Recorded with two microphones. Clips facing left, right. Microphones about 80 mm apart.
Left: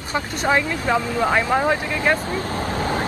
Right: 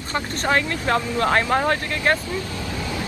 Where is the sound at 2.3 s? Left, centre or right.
Left.